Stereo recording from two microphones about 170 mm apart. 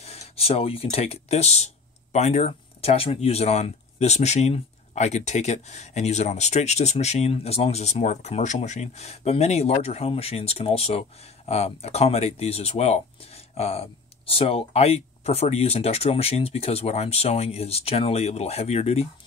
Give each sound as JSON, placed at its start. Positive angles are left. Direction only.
{"t": 0.0, "sound": "speech", "side_deg": 35}